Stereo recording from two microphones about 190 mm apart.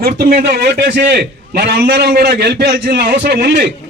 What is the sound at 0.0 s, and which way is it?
A man's voice, 50° right (ahead or behind).